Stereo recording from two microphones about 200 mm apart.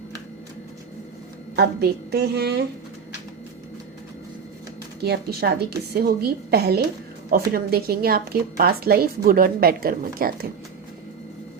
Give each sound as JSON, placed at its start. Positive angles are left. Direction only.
{"t": 1.5, "sound": "a woman's voice", "side_deg": -55}
{"t": 5.0, "sound": "a woman's voice", "side_deg": -55}